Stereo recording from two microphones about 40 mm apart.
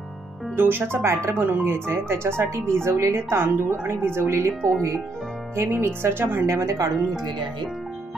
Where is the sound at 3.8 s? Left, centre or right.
Right.